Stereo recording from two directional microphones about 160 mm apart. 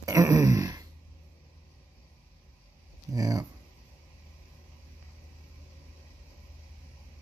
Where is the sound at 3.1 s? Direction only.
20° right (ahead or behind).